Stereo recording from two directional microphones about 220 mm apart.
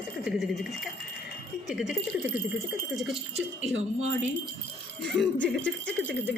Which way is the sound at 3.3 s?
30° right (ahead or behind).